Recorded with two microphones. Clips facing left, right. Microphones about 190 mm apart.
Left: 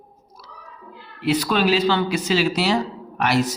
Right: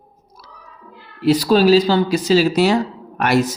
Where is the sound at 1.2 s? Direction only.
35° right (ahead or behind).